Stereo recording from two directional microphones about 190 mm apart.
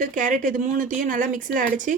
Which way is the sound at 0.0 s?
45° right (ahead or behind).